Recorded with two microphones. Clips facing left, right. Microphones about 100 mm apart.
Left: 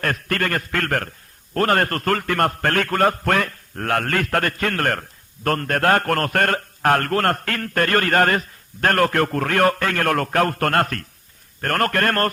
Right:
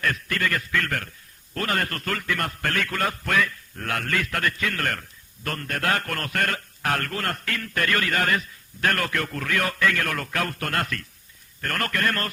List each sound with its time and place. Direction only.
0.0 s a man's voice: 55° left (ahead or behind)